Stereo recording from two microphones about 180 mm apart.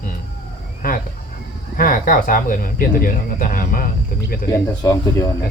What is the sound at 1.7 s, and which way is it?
Speech, 50° left (ahead or behind).